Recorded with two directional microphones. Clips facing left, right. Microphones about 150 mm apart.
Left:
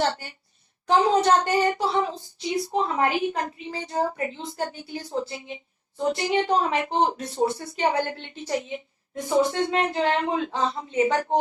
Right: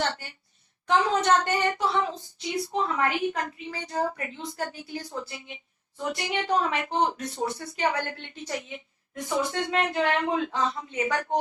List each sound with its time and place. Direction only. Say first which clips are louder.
0.0 s speech: left 4 dB; 35° left (ahead or behind)